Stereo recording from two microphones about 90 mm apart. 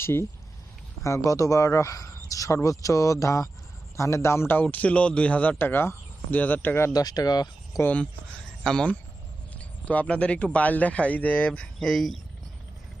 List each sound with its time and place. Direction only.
0.0 s a man's voice: 30° left (ahead or behind)
6.9 s speech: 45° left (ahead or behind)
7.8 s a man's voice: 15° left (ahead or behind)